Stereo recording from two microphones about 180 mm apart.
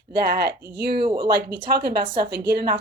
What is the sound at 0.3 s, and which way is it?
Speech, 60° right (ahead or behind).